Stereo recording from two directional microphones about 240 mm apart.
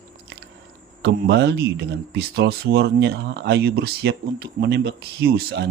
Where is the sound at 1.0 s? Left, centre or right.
Right.